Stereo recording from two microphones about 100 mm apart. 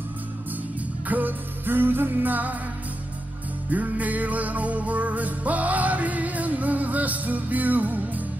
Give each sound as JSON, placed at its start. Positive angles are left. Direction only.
{"t": 1.0, "sound": "music", "side_deg": -15}
{"t": 3.7, "sound": "music", "side_deg": -15}